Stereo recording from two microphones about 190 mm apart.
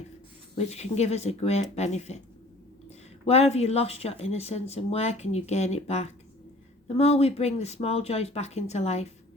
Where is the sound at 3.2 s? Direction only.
35° left (ahead or behind).